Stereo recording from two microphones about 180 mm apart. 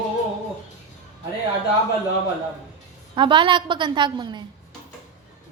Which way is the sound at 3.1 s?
25° right (ahead or behind).